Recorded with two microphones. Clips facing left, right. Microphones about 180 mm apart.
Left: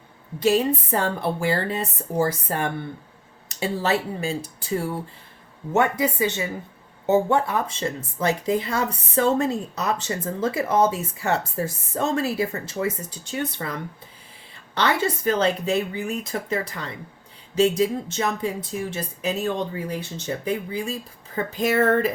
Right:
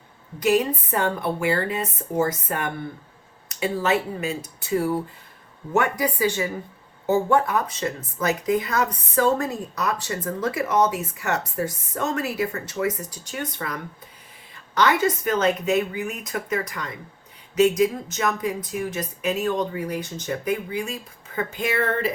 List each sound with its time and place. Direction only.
0.3 s speech: 25° left (ahead or behind)
5.7 s speech: 25° left (ahead or behind)
14.8 s speech: 30° left (ahead or behind)